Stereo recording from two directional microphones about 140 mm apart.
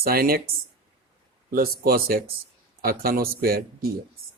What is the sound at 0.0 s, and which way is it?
Speech, 90° right.